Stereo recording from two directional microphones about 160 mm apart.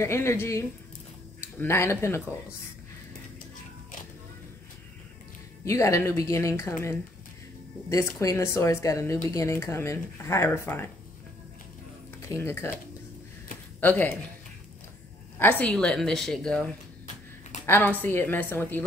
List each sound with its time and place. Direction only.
0.0 s speech: 15° left (ahead or behind)
5.7 s speech: 20° left (ahead or behind)
12.2 s speech: 15° left (ahead or behind)
13.7 s speech: 10° left (ahead or behind)
15.6 s speech: 5° left (ahead or behind)
17.6 s speech: 15° left (ahead or behind)